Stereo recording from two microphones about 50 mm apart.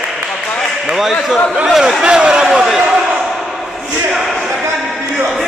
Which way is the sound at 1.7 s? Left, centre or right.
Centre.